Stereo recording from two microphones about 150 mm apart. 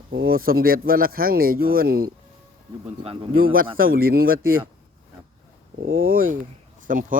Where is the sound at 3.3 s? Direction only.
75° right (ahead or behind).